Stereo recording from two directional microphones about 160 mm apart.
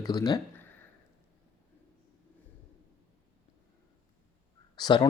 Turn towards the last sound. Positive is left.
turn(degrees=25)  # may be behind; listen again after turning